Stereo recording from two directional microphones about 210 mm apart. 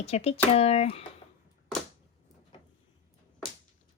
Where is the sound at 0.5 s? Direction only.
30° left (ahead or behind).